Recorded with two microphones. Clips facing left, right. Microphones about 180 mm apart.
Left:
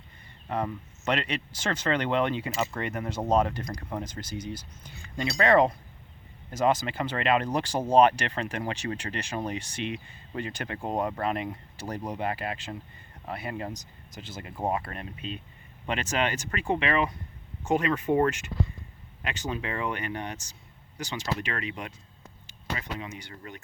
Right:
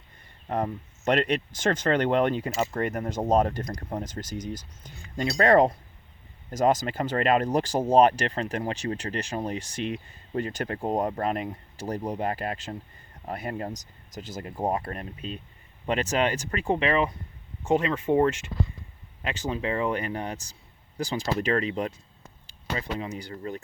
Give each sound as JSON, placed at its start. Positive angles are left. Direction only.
{"t": 0.4, "sound": "speech", "side_deg": -40}
{"t": 4.0, "sound": "speech", "side_deg": 10}
{"t": 4.8, "sound": "speech", "side_deg": -40}